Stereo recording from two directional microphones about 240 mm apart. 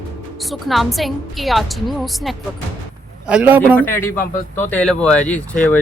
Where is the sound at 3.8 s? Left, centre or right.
Centre.